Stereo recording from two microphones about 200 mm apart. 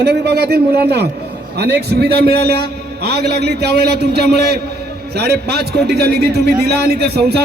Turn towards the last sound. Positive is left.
turn(degrees=-55)  # may be behind; listen again after turning